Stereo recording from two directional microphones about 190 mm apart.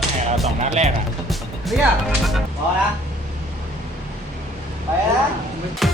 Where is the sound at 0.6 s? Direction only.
35° right (ahead or behind).